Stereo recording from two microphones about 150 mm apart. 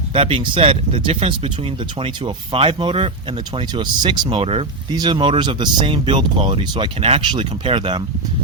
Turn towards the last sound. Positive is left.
turn(degrees=-30)  # may be behind; listen again after turning